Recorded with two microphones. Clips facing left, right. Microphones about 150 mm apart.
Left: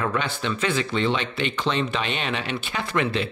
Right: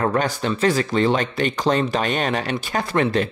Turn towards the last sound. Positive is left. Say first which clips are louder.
# right 5 dB
turn(degrees=-40)  # may be behind; listen again after turning